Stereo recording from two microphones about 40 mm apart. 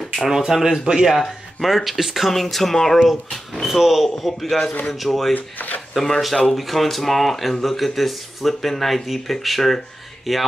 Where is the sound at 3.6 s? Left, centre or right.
Centre.